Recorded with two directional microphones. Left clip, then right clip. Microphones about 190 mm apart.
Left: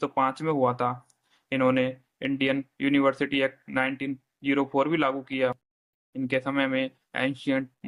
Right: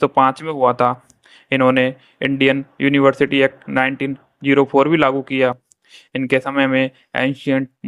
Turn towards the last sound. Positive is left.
turn(degrees=-30)  # may be behind; listen again after turning